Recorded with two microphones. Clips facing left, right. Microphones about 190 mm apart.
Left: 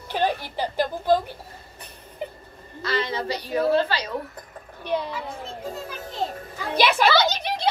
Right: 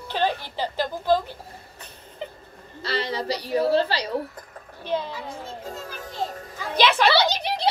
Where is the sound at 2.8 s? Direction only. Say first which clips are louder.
Left 1 dB; 35° right (ahead or behind).